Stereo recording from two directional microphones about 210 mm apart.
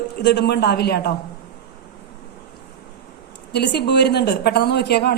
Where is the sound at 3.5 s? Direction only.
55° left (ahead or behind).